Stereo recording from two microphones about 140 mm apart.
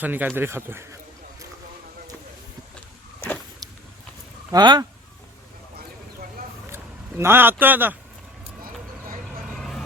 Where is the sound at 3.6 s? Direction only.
30° right (ahead or behind).